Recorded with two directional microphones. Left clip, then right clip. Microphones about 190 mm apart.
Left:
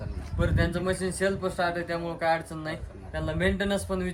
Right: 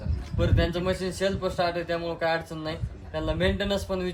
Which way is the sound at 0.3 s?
15° right (ahead or behind).